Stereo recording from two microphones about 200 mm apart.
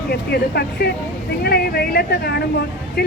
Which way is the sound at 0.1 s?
55° left (ahead or behind).